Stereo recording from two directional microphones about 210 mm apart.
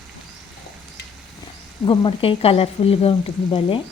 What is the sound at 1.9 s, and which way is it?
A woman's voice, 25° left (ahead or behind).